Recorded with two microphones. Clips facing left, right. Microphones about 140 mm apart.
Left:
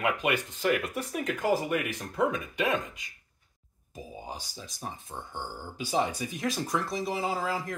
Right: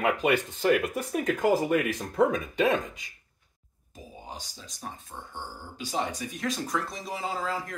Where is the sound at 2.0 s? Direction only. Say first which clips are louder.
Right 4 dB; 30° right (ahead or behind).